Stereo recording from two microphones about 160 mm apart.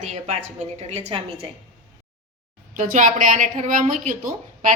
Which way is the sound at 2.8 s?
55° right (ahead or behind).